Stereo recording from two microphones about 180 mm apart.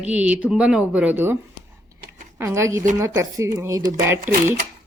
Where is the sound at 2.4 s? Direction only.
15° right (ahead or behind).